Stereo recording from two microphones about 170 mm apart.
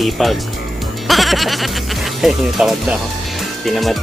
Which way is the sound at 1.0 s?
Centre (ahead or behind).